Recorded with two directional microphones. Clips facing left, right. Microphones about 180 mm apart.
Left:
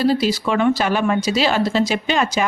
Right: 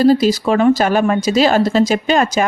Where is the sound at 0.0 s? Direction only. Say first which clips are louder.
Right 6 dB; 45° right (ahead or behind).